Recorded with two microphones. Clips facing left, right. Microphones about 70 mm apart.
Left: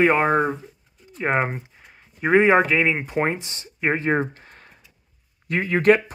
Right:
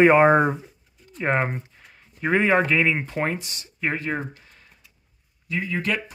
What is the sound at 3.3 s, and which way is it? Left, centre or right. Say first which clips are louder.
Speech: left 2 dB; left.